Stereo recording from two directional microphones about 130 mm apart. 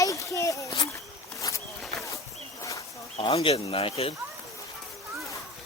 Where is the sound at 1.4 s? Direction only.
25° left (ahead or behind).